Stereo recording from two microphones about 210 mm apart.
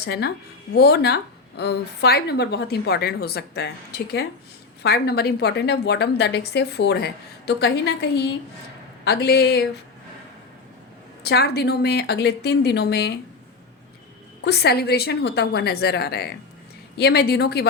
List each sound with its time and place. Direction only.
0.0 s speech: 50° left (ahead or behind)
11.2 s speech: 50° left (ahead or behind)
14.4 s speech: 50° left (ahead or behind)